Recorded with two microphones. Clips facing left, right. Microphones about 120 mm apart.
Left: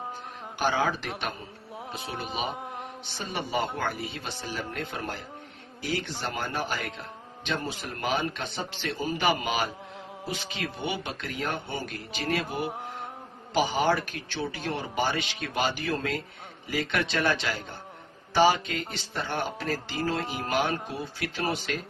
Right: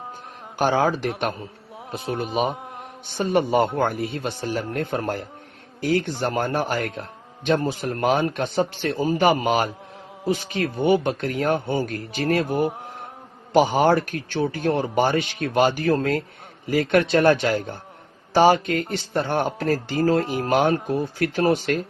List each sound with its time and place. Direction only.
0.6 s speech: 50° right (ahead or behind)
2.5 s mantra: centre (ahead or behind)
3.1 s speech: 50° right (ahead or behind)